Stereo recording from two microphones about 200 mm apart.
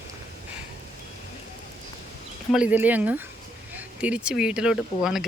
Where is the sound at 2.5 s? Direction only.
5° right (ahead or behind).